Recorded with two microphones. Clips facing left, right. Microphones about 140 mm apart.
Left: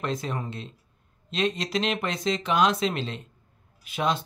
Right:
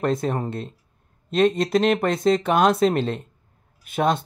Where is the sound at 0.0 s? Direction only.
50° right (ahead or behind).